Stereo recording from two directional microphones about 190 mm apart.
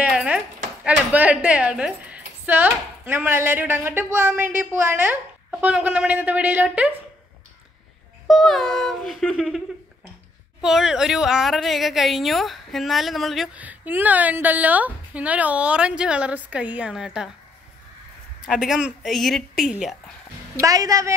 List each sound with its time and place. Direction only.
0.0 s a sound: 5° right (ahead or behind)
0.8 s speech: 5° right (ahead or behind)
8.3 s a woman's voice: centre (ahead or behind)
10.6 s a woman's voice: centre (ahead or behind)
18.5 s a woman's voice: 5° right (ahead or behind)
20.6 s speech: 20° right (ahead or behind)